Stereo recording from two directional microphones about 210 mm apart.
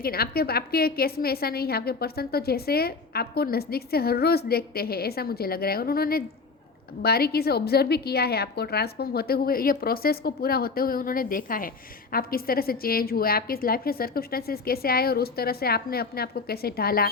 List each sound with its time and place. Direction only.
0.0 s a woman's voice: 45° left (ahead or behind)